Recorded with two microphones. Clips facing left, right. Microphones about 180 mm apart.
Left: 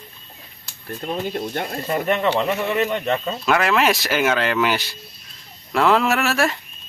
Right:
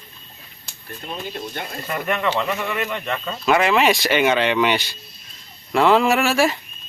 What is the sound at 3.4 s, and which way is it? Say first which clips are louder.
Speech: right 2 dB; centre (ahead or behind).